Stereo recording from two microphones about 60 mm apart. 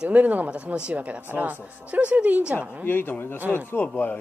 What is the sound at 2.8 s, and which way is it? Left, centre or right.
A man's voice, left.